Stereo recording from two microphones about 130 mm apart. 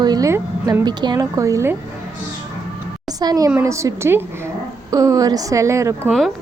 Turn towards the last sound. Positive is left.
turn(degrees=-20)  # may be behind; listen again after turning